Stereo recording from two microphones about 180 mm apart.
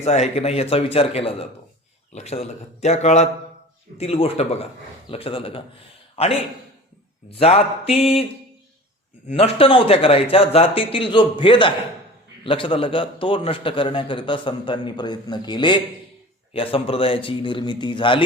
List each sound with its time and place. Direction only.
0.0 s a man's voice: 35° left (ahead or behind)
9.3 s a man's voice: 30° left (ahead or behind)